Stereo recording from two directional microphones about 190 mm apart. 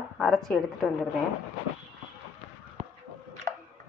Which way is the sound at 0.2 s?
Centre (ahead or behind).